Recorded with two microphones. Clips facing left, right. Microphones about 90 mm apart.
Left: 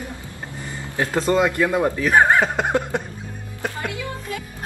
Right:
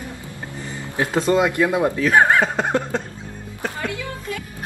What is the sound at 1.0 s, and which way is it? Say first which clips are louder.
Speech: right 1 dB; 15° right (ahead or behind).